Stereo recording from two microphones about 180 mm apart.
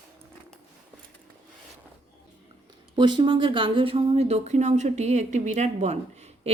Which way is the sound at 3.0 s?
25° right (ahead or behind).